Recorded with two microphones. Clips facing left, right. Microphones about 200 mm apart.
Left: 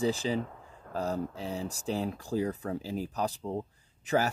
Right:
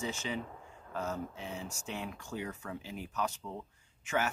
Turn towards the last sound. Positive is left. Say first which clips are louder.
# left 5 dB
turn(degrees=35)  # may be behind; listen again after turning